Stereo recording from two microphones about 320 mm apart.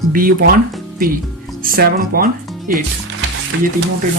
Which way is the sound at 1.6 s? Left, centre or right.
Right.